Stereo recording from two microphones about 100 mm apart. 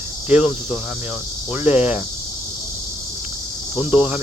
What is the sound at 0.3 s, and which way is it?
Speech, 10° right (ahead or behind).